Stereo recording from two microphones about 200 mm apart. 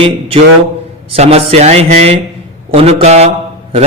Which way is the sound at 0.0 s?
30° right (ahead or behind).